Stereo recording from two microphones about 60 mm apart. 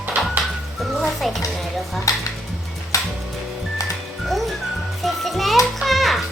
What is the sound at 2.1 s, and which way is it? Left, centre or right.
Music, left.